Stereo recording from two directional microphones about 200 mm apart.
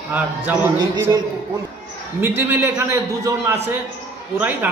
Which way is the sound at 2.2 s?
10° right (ahead or behind).